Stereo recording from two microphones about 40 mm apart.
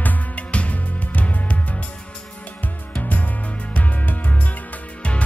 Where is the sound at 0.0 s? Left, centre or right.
Left.